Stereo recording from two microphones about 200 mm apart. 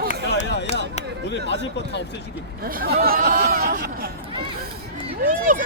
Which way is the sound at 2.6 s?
50° right (ahead or behind).